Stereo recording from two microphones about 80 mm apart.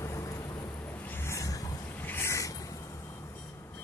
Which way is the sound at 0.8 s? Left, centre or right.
Left.